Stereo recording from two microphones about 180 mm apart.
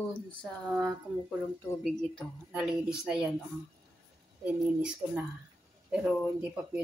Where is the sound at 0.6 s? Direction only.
Centre (ahead or behind).